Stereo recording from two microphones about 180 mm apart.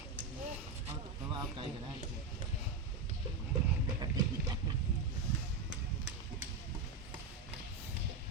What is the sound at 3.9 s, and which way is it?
Horse, 20° right (ahead or behind).